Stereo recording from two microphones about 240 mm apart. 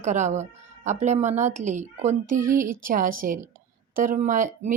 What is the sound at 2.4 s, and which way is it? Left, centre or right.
Speech, centre.